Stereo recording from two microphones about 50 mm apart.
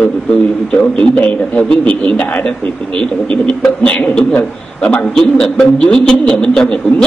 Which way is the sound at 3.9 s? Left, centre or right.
Left.